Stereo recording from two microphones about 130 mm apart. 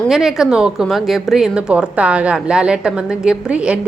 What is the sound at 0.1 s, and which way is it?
A woman's voice, 5° right (ahead or behind).